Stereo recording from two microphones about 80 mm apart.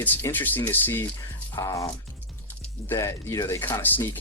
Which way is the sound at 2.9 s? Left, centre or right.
Left.